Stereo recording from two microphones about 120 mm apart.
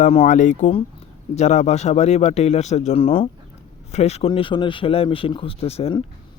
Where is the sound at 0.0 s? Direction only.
75° left (ahead or behind); by 0.7 s 90° left.